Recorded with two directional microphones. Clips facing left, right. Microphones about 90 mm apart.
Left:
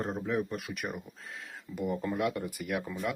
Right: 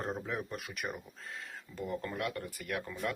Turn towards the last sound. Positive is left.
turn(degrees=10)  # may be behind; listen again after turning